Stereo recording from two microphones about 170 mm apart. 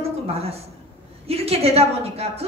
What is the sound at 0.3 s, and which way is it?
A woman's voice, 35° right (ahead or behind).